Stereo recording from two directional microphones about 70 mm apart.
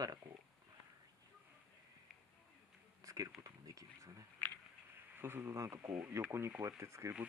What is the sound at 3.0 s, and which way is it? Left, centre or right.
Speech, right.